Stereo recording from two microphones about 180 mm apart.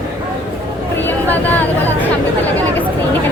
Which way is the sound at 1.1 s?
10° left (ahead or behind).